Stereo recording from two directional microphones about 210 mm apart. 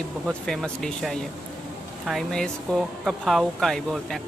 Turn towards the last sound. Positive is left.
turn(degrees=0)  # may be behind; listen again after turning